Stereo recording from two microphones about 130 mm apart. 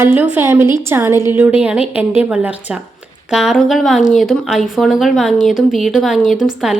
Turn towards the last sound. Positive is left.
turn(degrees=-5)  # may be behind; listen again after turning